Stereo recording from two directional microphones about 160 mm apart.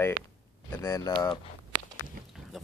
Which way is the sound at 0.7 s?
20° left (ahead or behind).